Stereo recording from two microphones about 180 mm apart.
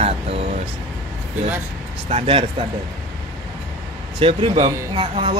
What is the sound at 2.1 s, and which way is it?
Speech, 30° right (ahead or behind).